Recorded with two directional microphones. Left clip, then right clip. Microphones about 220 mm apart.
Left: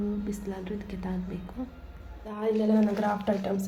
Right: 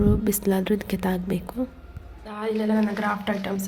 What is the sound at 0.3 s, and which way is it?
A woman's voice, 45° right (ahead or behind).